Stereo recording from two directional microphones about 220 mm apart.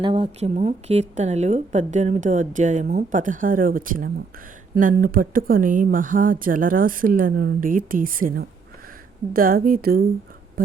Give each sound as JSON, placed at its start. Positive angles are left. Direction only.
{"t": 0.0, "sound": "speech", "side_deg": -25}